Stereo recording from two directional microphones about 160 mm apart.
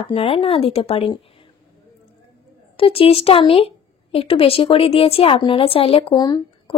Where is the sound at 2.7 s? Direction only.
35° left (ahead or behind).